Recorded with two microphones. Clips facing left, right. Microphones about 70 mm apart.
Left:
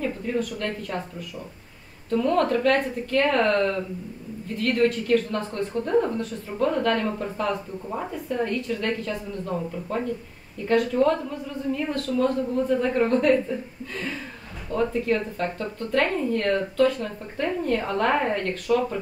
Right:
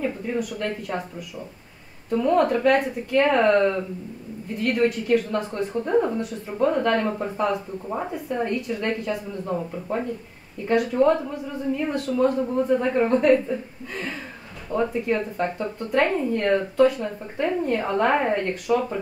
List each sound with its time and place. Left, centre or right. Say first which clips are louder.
0.0 s speech: even; centre
2.0 s a woman's voice: right 2 dB; centre